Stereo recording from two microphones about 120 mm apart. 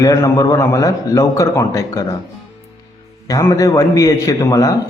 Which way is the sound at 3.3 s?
30° left (ahead or behind).